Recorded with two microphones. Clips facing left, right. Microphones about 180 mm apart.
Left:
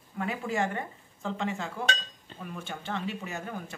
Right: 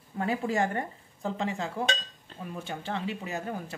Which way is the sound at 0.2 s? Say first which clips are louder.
Right 3 dB; 35° right (ahead or behind).